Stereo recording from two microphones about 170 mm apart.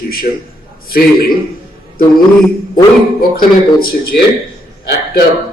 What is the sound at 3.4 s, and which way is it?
A man's voice, 60° left (ahead or behind).